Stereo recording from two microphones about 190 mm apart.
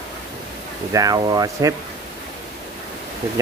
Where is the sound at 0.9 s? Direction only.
20° right (ahead or behind).